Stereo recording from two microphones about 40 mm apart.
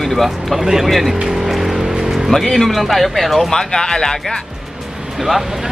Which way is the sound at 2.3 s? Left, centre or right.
Centre.